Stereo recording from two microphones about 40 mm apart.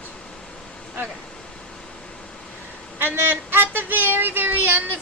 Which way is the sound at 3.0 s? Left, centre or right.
Right.